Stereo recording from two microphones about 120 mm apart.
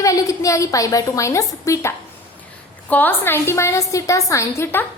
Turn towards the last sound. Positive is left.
turn(degrees=20)  # may be behind; listen again after turning